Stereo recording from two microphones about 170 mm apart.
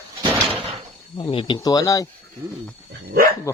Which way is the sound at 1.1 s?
30° left (ahead or behind).